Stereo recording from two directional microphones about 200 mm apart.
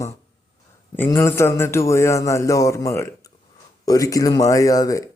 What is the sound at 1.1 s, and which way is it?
Speech, 15° left (ahead or behind).